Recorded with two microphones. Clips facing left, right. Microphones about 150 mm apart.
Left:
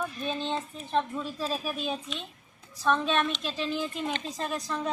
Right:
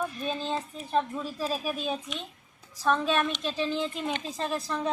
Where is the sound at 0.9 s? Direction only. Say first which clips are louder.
Right 1 dB; 10° right (ahead or behind).